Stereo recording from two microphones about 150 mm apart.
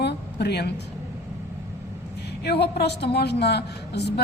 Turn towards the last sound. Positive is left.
turn(degrees=90)